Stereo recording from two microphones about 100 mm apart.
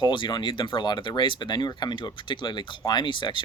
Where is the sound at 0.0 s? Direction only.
50° left (ahead or behind).